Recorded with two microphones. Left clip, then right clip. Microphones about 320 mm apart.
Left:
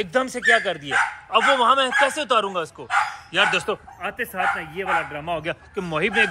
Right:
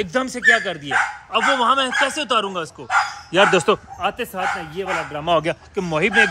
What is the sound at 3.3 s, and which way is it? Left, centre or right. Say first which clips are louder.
Speech: right 8 dB; right.